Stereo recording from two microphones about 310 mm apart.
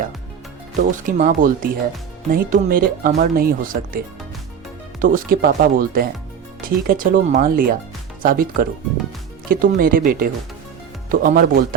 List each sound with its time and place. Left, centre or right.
0.8 s speech: right